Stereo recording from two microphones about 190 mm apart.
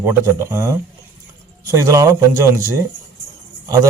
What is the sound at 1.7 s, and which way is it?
Speech, 15° right (ahead or behind).